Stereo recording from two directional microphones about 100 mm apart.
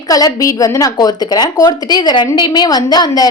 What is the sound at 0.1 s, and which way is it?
A woman's voice, 35° left (ahead or behind).